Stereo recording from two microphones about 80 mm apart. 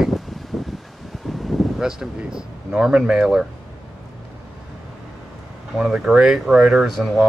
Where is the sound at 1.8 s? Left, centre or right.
Centre.